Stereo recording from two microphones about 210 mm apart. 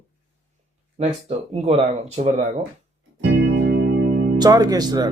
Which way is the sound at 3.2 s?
60° right (ahead or behind).